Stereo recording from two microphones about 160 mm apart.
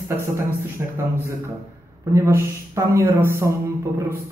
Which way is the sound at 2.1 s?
20° right (ahead or behind).